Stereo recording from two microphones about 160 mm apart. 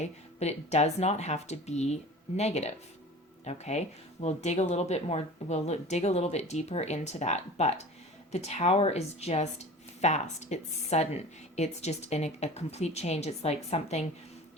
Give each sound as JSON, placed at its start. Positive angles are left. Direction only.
{"t": 0.0, "sound": "a woman's voice", "side_deg": 45}